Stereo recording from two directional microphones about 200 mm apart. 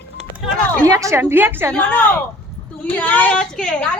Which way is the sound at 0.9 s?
15° right (ahead or behind).